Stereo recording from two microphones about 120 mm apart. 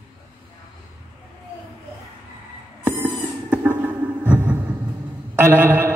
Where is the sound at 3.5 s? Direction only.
15° right (ahead or behind).